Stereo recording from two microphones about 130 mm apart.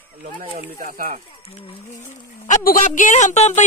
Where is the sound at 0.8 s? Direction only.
90° right.